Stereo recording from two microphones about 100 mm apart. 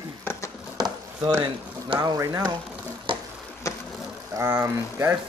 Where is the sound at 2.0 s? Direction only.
35° right (ahead or behind).